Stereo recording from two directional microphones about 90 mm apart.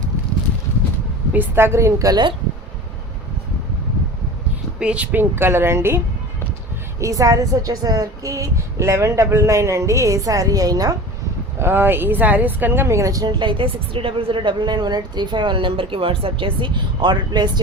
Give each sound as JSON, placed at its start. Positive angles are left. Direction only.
{"t": 1.3, "sound": "speech", "side_deg": -25}
{"t": 4.8, "sound": "speech", "side_deg": -15}
{"t": 5.3, "sound": "speech", "side_deg": -25}
{"t": 7.0, "sound": "a woman's voice", "side_deg": -40}
{"t": 11.6, "sound": "speech", "side_deg": -25}
{"t": 13.4, "sound": "a woman's voice", "side_deg": -70}